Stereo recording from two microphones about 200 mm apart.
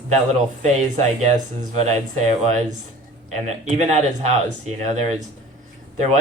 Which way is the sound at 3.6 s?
35° right (ahead or behind).